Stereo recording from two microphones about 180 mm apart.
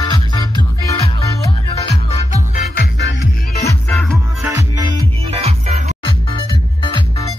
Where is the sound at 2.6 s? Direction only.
70° left (ahead or behind).